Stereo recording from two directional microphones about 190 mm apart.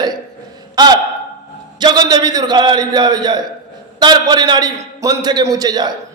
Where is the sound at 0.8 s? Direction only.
20° right (ahead or behind).